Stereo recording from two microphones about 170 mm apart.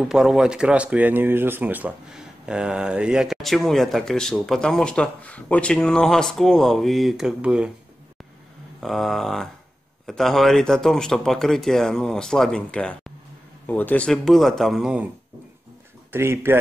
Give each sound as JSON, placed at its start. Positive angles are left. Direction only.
{"t": 0.1, "sound": "speech", "side_deg": -5}
{"t": 8.8, "sound": "speech", "side_deg": 0}
{"t": 16.1, "sound": "speech", "side_deg": -15}